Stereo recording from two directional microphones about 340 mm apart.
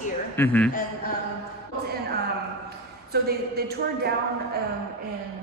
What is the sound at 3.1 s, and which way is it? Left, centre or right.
A woman's voice, right.